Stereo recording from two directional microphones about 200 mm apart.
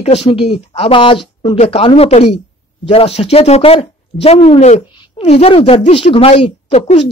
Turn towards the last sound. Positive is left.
turn(degrees=30)  # may be behind; listen again after turning